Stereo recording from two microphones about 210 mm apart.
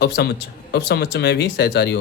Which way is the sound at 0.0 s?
50° left (ahead or behind).